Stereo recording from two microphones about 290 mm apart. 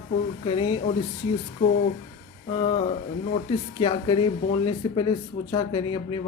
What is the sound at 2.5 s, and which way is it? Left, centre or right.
Speech, centre.